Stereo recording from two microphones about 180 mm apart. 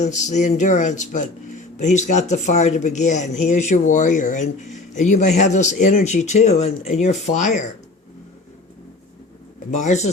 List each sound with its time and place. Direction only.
0.0 s speech: 40° left (ahead or behind)
9.7 s speech: 40° left (ahead or behind)